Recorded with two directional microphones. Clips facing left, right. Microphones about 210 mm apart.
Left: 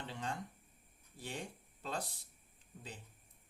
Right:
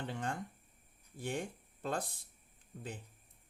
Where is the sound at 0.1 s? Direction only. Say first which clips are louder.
Right 1 dB; 50° right (ahead or behind).